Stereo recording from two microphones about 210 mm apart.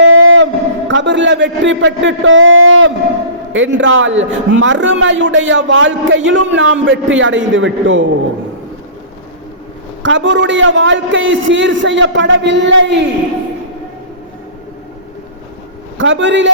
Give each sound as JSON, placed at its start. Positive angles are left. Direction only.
{"t": 0.0, "sound": "a sound", "side_deg": -75}
{"t": 0.9, "sound": "a man's voice", "side_deg": -60}
{"t": 10.0, "sound": "a man's voice", "side_deg": -60}
{"t": 16.0, "sound": "a man's voice", "side_deg": -60}